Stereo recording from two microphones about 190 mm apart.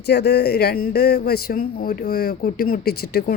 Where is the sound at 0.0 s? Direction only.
60° left (ahead or behind).